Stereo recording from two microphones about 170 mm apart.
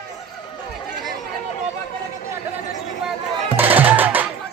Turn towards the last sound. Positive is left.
turn(degrees=-10)  # may be behind; listen again after turning